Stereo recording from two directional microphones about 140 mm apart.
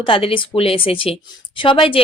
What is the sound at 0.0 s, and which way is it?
Speech, 40° left (ahead or behind).